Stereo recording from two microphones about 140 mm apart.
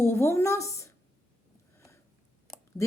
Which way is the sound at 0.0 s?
20° left (ahead or behind).